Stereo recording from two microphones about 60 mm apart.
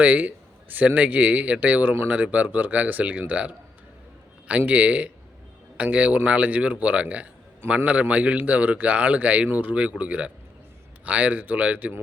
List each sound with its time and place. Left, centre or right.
0.0 s speech: right